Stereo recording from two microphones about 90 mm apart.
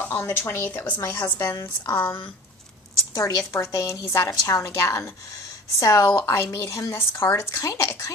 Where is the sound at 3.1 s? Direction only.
40° left (ahead or behind).